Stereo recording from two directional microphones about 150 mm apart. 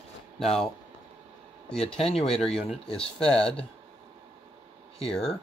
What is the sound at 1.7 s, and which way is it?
Speech, 5° left (ahead or behind).